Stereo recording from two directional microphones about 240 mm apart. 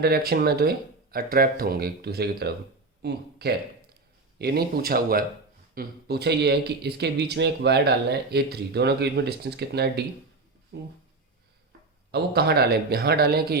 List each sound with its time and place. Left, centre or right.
0.0 s speech: right
12.1 s speech: right